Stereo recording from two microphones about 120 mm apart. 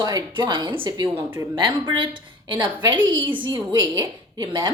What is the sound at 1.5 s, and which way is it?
Speech, 40° right (ahead or behind).